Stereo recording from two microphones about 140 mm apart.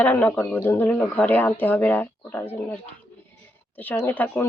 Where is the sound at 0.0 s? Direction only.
15° left (ahead or behind).